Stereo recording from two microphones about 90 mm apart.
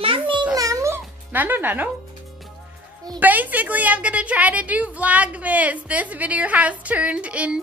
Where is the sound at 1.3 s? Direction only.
20° right (ahead or behind).